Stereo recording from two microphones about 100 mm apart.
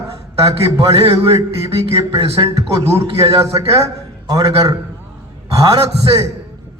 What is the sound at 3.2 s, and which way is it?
Speech, 80° right.